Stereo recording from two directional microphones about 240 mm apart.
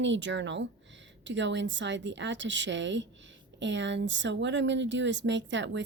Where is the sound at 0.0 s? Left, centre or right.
Right.